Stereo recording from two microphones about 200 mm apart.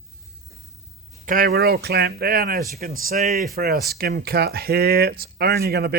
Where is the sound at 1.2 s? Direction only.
45° right (ahead or behind).